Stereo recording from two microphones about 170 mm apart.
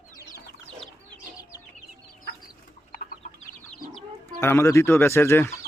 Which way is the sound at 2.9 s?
60° left (ahead or behind).